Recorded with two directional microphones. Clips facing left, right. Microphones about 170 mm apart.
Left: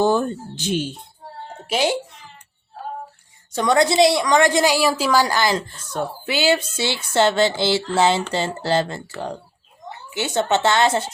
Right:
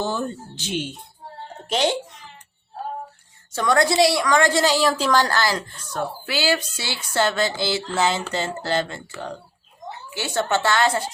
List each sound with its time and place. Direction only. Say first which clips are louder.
0.0 s speech: left 7 dB; 50° left (ahead or behind)
1.6 s speech: left 1 dB; 10° left (ahead or behind)
3.5 s a woman's voice: left 2 dB; 20° left (ahead or behind); by 9.1 s 35° left (ahead or behind)
10.2 s a woman's voice: left 3 dB; 20° left (ahead or behind)